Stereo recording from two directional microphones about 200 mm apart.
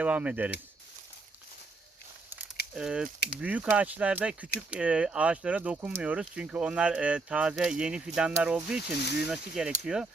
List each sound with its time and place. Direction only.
0.0 s speech: 5° right (ahead or behind)
2.7 s speech: 5° right (ahead or behind)
8.8 s speech: 55° left (ahead or behind)
9.2 s speech: 5° right (ahead or behind)